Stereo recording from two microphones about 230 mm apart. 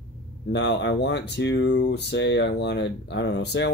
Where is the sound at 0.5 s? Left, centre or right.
Left.